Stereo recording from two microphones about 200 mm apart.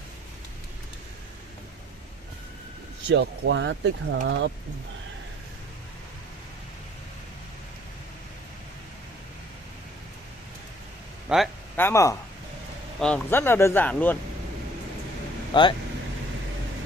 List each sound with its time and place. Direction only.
3.1 s speech: 65° right (ahead or behind)
11.2 s speech: centre (ahead or behind)
11.7 s speech: 10° left (ahead or behind)
15.5 s speech: 25° left (ahead or behind)